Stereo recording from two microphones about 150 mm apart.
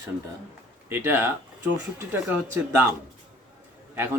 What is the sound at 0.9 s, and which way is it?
Speech, 15° right (ahead or behind).